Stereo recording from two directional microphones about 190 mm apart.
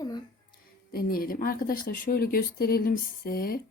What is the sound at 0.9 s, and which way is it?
A woman's voice, 50° left (ahead or behind).